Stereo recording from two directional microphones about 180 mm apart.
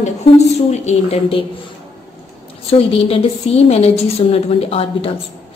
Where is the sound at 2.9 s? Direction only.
30° left (ahead or behind).